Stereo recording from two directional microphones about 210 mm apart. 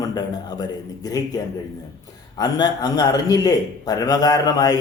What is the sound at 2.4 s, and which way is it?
A man's voice, 20° left (ahead or behind).